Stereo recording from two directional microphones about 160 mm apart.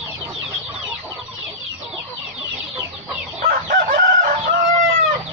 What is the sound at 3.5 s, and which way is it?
Chicken, 60° right (ahead or behind).